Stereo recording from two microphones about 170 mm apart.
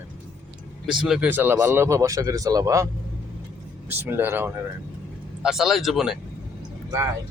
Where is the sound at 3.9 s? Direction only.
10° right (ahead or behind).